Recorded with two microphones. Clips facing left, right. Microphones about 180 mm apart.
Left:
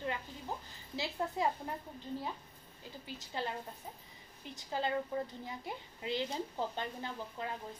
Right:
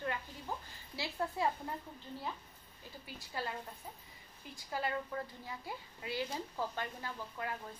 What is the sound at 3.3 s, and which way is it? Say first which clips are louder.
Speech: left 2 dB; 25° left (ahead or behind).